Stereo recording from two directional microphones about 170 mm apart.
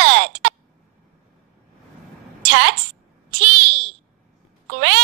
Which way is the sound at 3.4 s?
90° right.